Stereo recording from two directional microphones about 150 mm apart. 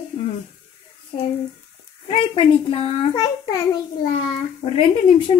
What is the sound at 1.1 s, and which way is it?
Speech, 50° left (ahead or behind).